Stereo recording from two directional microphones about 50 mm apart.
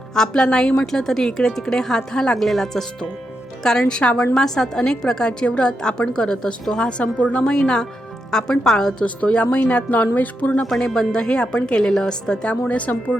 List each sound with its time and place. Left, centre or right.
0.1 s a woman's voice: centre
7.4 s a woman's voice: centre
9.0 s speech: left
10.6 s a woman's voice: centre; by 13.1 s left